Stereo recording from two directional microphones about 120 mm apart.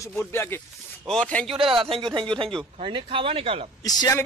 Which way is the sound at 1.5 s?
45° right (ahead or behind).